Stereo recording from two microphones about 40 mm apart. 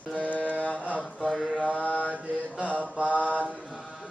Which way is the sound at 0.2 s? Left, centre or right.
Left.